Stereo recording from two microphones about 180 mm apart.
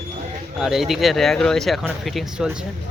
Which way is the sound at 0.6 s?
Centre (ahead or behind).